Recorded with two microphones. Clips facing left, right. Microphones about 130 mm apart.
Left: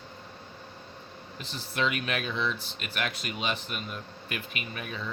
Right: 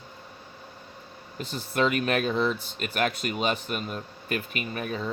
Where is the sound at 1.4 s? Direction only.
45° right (ahead or behind).